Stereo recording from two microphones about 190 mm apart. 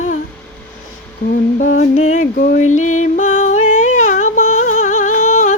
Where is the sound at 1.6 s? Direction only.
40° left (ahead or behind).